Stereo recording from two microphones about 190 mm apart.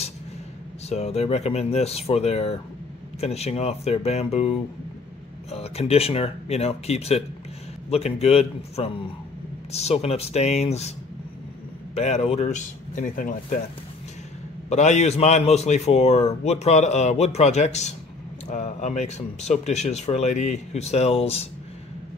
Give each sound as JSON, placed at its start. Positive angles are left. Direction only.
{"t": 0.8, "sound": "a man's voice", "side_deg": 35}
{"t": 11.9, "sound": "a man's voice", "side_deg": 35}
{"t": 14.7, "sound": "a man's voice", "side_deg": 35}